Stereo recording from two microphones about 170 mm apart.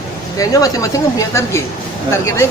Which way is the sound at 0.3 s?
20° left (ahead or behind).